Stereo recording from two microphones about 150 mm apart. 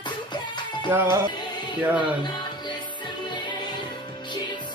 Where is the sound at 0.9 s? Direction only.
20° right (ahead or behind).